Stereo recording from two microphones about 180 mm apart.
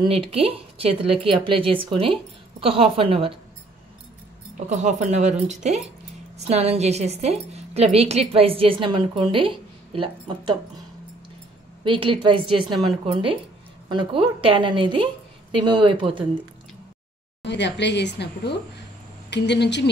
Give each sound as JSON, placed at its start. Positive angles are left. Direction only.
{"t": 0.0, "sound": "a woman's voice", "side_deg": -30}
{"t": 4.6, "sound": "a woman's voice", "side_deg": -40}
{"t": 11.8, "sound": "speech", "side_deg": -30}
{"t": 17.4, "sound": "speech", "side_deg": 75}